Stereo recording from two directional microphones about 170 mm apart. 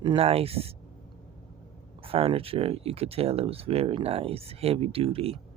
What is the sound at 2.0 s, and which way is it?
Speech, 35° right (ahead or behind).